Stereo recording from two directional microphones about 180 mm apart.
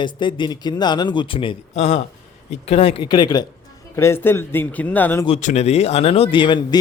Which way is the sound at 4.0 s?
15° left (ahead or behind).